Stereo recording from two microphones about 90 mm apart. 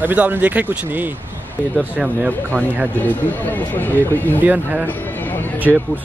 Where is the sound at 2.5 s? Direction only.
20° right (ahead or behind).